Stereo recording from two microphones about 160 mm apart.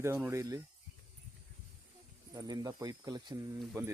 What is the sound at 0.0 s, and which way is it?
Speech, 15° right (ahead or behind).